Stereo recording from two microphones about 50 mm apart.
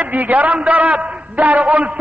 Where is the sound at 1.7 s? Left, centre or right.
Right.